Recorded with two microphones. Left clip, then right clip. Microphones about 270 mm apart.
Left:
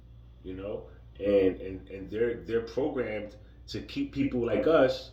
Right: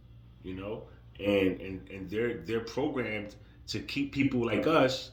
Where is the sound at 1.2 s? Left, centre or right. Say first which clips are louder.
Left 3 dB; right.